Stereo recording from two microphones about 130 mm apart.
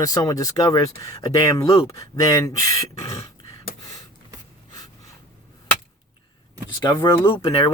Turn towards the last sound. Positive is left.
turn(degrees=30)  # may be behind; listen again after turning